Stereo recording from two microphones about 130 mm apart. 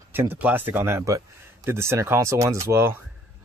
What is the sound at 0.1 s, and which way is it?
Speech, 15° right (ahead or behind).